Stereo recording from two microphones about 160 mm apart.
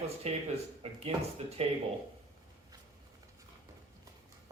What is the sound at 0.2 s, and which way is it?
A man's voice, 40° right (ahead or behind).